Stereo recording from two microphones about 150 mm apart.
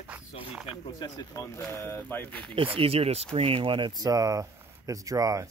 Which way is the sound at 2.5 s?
35° right (ahead or behind).